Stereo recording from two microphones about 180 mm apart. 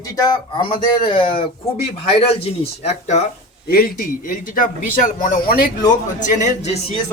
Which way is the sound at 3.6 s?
55° left (ahead or behind).